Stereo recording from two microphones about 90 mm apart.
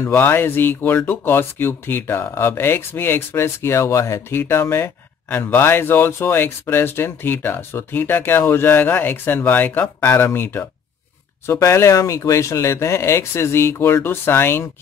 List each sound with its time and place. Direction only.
0.0 s speech: 25° left (ahead or behind)